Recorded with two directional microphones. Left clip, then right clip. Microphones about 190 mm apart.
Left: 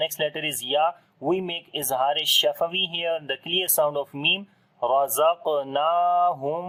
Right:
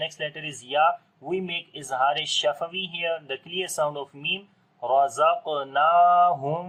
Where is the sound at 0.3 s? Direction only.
45° left (ahead or behind).